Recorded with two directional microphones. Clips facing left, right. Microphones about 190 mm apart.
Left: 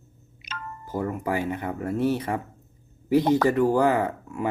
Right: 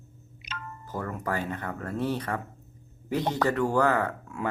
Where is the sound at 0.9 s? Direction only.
15° left (ahead or behind).